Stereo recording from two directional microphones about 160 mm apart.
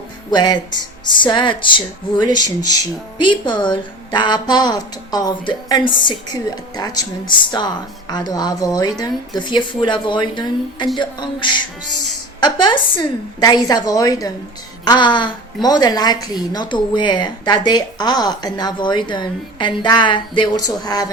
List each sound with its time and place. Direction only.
0.3 s a woman's voice: 25° left (ahead or behind)